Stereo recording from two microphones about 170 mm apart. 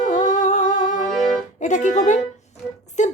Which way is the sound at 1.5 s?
45° left (ahead or behind).